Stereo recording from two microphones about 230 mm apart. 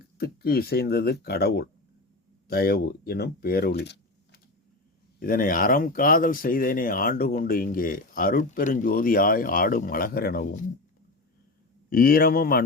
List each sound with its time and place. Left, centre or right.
0.2 s speech: left
11.9 s speech: left